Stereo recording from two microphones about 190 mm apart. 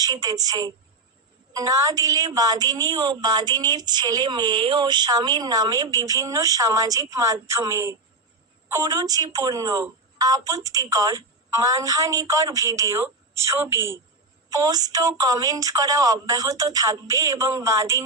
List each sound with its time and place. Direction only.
0.0 s a woman's voice: 20° right (ahead or behind)